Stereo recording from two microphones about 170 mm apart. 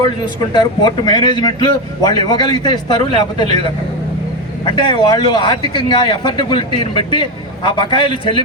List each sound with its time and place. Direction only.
0.5 s speech: 25° left (ahead or behind)
4.6 s speech: 25° left (ahead or behind)